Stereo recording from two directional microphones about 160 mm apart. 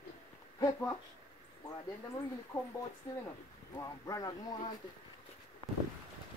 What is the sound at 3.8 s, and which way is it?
Speech, 20° left (ahead or behind).